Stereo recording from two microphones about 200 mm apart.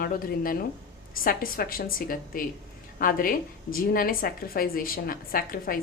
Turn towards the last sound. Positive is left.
turn(degrees=45)  # may be behind; listen again after turning